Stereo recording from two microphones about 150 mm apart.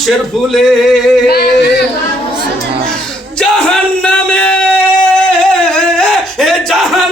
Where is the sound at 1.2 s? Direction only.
90° left.